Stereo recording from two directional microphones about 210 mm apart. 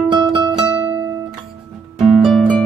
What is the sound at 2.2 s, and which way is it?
Music, centre (ahead or behind).